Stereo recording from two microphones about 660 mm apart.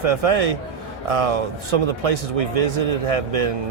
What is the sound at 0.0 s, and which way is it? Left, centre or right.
Speech, right.